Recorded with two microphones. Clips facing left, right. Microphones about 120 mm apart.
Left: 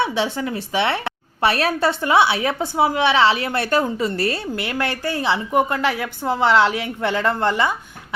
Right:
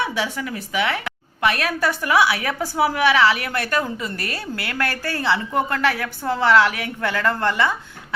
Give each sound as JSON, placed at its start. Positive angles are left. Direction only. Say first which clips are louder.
{"t": 0.0, "sound": "a woman's voice", "louder": "left 3 dB", "side_deg": 25}